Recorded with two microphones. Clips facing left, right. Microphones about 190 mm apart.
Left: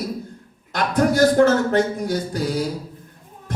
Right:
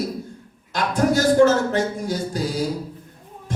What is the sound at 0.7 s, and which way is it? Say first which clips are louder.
A man's voice: left 1 dB; 55° left (ahead or behind).